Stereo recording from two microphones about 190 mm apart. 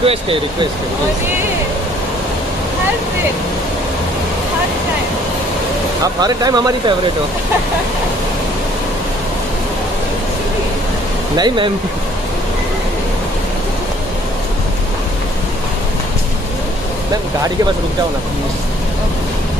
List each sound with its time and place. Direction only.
0.0 s speech: 30° right (ahead or behind)
6.2 s speech: 20° right (ahead or behind)
11.3 s speech: 25° right (ahead or behind)